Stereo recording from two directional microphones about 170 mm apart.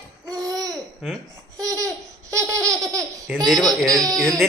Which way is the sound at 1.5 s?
20° right (ahead or behind).